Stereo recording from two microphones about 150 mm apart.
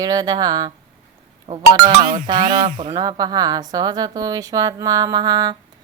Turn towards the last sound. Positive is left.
turn(degrees=-25)  # may be behind; listen again after turning